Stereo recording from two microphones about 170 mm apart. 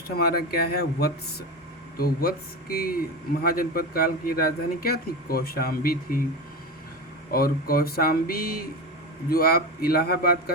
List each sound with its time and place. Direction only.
0.2 s a man's voice: 65° left (ahead or behind)
7.3 s a man's voice: 60° left (ahead or behind)